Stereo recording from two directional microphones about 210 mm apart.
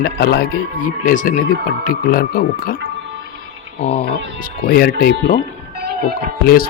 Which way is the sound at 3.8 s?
25° left (ahead or behind).